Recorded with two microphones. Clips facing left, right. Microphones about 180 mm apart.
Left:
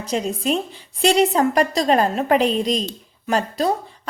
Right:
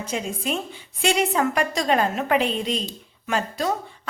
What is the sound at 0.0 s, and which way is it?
A woman's voice, 35° left (ahead or behind).